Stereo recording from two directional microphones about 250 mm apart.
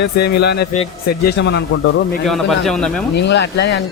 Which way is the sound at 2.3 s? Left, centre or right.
Centre.